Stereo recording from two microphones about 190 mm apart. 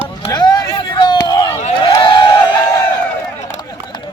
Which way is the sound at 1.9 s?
20° left (ahead or behind).